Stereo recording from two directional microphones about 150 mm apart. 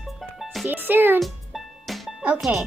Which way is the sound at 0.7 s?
15° right (ahead or behind).